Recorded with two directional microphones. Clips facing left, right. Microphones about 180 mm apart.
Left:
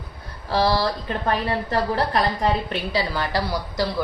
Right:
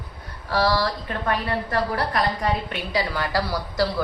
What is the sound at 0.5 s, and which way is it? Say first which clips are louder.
Speech: left 1 dB; 25° left (ahead or behind).